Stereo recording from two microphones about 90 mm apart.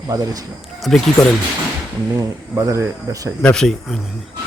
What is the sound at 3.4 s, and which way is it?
Speech, 5° left (ahead or behind).